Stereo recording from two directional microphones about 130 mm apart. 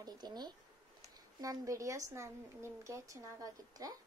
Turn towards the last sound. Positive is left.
turn(degrees=-25)  # may be behind; listen again after turning